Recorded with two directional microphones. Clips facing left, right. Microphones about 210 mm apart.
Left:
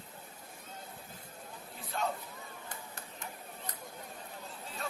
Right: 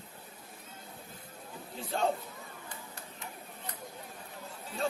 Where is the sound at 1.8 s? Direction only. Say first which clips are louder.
Right 5 dB; 30° right (ahead or behind).